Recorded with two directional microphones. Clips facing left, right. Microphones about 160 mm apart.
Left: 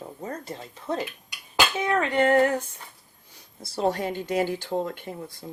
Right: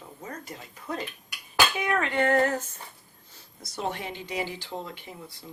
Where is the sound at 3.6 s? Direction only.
30° left (ahead or behind); by 5.4 s 50° left (ahead or behind).